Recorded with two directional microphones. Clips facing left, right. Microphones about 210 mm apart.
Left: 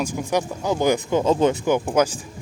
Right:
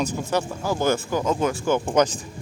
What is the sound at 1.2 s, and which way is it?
Speech, 30° left (ahead or behind).